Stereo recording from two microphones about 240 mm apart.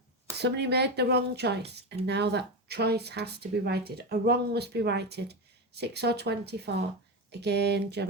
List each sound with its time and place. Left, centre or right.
0.3 s speech: right